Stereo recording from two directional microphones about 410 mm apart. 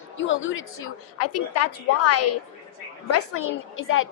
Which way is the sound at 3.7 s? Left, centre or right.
Left.